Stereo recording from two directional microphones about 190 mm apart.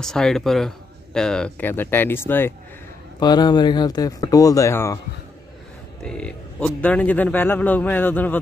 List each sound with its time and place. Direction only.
0.0 s speech: 5° left (ahead or behind)
3.2 s speech: 20° left (ahead or behind)
6.0 s speech: 5° left (ahead or behind)